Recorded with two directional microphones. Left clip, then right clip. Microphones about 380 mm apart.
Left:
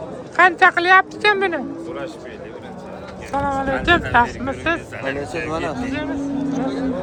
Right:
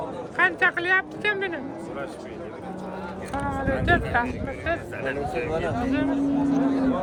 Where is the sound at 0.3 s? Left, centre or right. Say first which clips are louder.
Left 8 dB; centre.